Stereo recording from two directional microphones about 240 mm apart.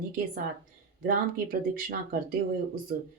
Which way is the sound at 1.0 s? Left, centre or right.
Right.